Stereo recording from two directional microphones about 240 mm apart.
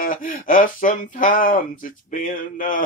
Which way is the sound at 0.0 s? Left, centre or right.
Left.